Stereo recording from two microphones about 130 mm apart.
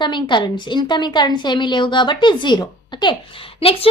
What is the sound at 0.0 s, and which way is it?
A woman's voice, 35° left (ahead or behind).